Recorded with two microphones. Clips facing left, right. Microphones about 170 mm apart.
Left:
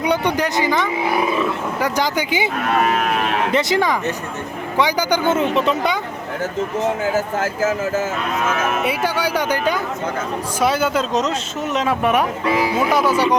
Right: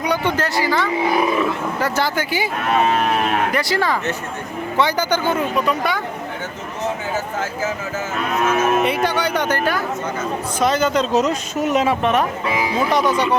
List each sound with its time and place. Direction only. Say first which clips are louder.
0.0 s speech: left 2 dB; 20° left (ahead or behind)
3.5 s speech: left 2 dB; 20° left (ahead or behind)
9.0 s speech: even; 10° left (ahead or behind)
11.1 s speech: right 2 dB; 10° right (ahead or behind)
12.7 s speech: left 1 dB; 5° left (ahead or behind)